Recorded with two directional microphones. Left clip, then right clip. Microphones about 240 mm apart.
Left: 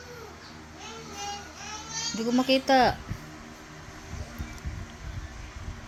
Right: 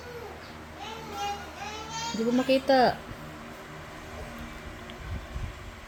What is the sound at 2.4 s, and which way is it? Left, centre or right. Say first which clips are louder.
Speech: left 1 dB; centre.